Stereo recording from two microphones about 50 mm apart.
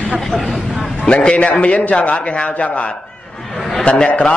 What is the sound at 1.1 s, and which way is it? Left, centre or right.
Speech, left.